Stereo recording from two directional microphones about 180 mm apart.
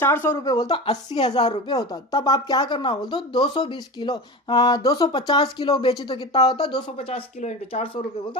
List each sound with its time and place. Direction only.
0.0 s speech: 10° left (ahead or behind); by 7.9 s 35° left (ahead or behind)